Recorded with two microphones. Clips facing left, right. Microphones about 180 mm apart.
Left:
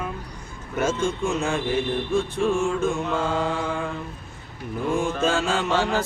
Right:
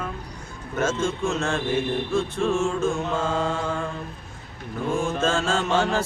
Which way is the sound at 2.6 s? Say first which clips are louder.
Even; 15° left (ahead or behind).